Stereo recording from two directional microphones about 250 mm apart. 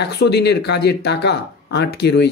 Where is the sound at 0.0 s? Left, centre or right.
Left.